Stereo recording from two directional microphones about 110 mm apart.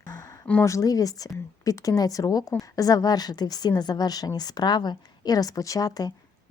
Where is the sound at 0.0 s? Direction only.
35° left (ahead or behind).